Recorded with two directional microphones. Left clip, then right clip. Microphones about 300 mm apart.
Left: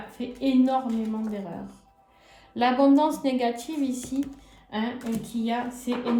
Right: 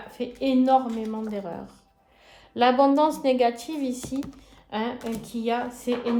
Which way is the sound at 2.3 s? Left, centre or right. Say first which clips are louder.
Right 3 dB; centre.